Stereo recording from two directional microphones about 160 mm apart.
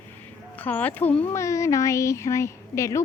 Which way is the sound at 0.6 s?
10° left (ahead or behind).